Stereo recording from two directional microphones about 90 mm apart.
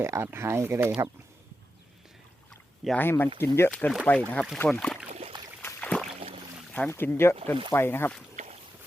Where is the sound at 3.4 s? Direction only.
30° left (ahead or behind).